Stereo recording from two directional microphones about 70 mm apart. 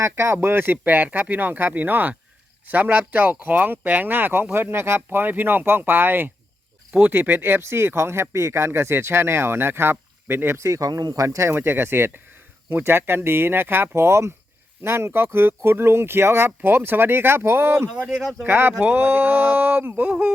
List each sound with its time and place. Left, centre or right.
0.0 s speech: right
0.3 s speech: right
18.1 s speech: centre
18.4 s speech: right